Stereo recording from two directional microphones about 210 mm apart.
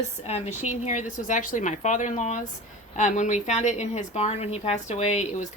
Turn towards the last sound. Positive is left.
turn(degrees=30)  # may be behind; listen again after turning